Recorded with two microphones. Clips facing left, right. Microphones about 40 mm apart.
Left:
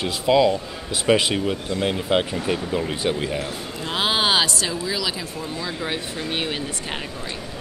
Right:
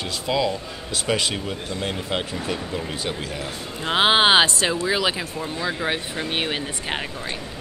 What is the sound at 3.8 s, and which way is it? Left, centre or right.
Speech, right.